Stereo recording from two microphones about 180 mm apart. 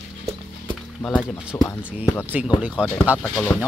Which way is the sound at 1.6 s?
15° left (ahead or behind).